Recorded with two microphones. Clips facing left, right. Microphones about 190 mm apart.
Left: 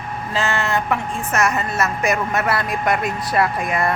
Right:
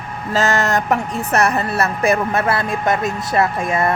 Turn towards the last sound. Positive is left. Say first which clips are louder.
# right 2 dB
turn(degrees=-25)  # may be behind; listen again after turning